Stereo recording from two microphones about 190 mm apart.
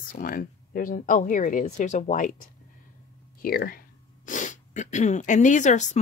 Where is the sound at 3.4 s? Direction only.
50° left (ahead or behind).